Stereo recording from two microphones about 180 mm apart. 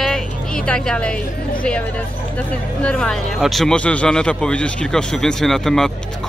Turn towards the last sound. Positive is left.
turn(degrees=0)  # may be behind; listen again after turning